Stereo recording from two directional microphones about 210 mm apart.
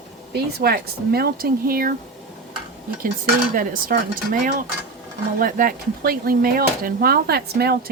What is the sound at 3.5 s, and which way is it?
Speech, 40° right (ahead or behind).